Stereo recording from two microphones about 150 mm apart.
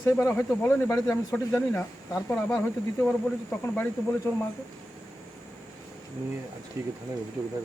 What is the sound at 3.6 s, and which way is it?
Speech, 15° left (ahead or behind).